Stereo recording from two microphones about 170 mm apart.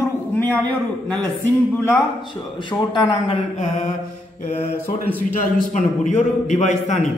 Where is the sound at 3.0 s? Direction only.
30° left (ahead or behind).